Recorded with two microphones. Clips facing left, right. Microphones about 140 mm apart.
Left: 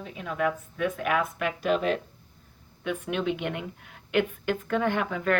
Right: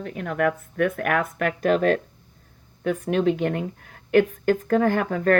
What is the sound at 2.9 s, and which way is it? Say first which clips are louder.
Speech: right 7 dB; 40° right (ahead or behind).